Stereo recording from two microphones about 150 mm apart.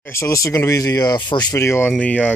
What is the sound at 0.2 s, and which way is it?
Speech, 20° left (ahead or behind).